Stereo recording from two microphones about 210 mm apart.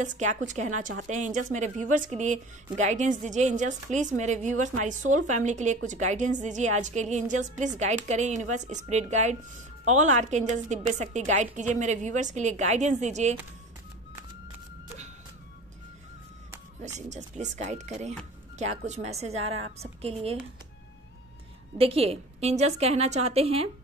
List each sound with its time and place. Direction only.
0.0 s a woman's voice: 35° right (ahead or behind)
17.1 s a woman's voice: 35° right (ahead or behind)
21.7 s a woman's voice: 30° right (ahead or behind)